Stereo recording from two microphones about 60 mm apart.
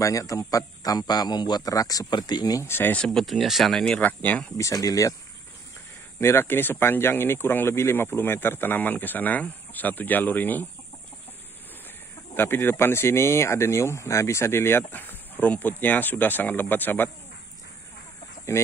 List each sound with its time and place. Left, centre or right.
0.0 s a man's voice: left
2.6 s speech: left
3.1 s speech: centre
4.0 s speech: left
4.6 s speech: left
6.1 s speech: left
12.4 s speech: left
18.5 s speech: left